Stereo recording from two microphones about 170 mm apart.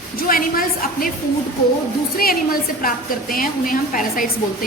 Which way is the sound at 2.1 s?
60° left (ahead or behind).